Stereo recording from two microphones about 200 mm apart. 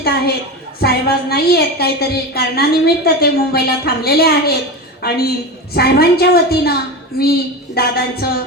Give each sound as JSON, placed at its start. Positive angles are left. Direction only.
{"t": 0.0, "sound": "a woman's voice", "side_deg": 50}
{"t": 7.8, "sound": "a woman's voice", "side_deg": 50}